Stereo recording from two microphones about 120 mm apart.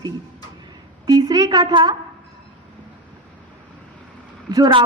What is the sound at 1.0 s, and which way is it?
Speech, 30° right (ahead or behind).